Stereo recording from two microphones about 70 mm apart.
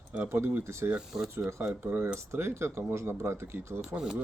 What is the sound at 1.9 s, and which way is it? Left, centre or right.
Speech, right.